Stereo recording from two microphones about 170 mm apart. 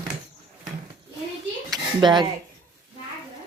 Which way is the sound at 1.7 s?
25° right (ahead or behind).